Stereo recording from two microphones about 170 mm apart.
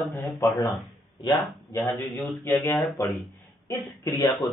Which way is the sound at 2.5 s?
15° left (ahead or behind).